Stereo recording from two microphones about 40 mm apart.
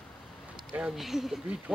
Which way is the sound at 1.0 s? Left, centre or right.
Centre.